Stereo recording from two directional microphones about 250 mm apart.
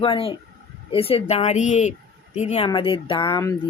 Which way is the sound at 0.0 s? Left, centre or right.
Left.